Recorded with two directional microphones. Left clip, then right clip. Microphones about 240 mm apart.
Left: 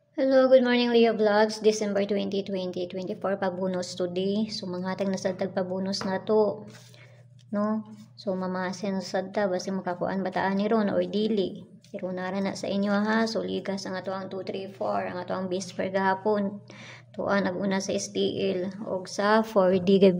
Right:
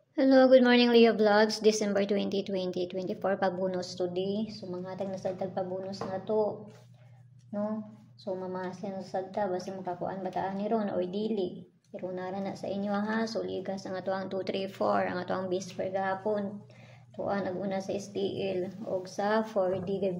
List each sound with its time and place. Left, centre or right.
0.1 s a woman's voice: centre; by 6.5 s left
8.3 s a woman's voice: left
13.8 s speech: centre
15.4 s a woman's voice: centre; by 20.2 s left